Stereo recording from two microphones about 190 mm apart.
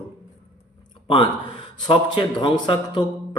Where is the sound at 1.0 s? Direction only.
25° left (ahead or behind).